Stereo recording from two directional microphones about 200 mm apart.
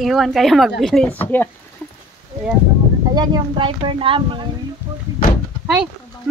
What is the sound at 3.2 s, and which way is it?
Speech, 20° right (ahead or behind).